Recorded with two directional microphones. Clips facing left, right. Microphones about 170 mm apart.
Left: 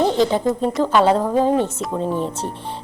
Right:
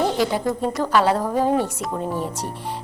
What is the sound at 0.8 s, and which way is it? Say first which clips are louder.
Speech: left 3 dB; 20° left (ahead or behind).